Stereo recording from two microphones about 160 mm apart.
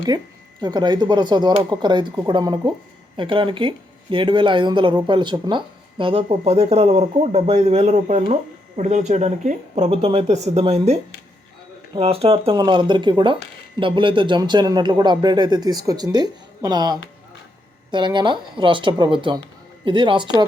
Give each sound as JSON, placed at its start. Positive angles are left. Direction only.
{"t": 0.6, "sound": "speech", "side_deg": -25}
{"t": 11.9, "sound": "speech", "side_deg": -40}